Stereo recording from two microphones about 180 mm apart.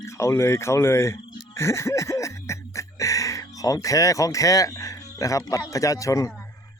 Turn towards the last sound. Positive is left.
turn(degrees=15)  # may be behind; listen again after turning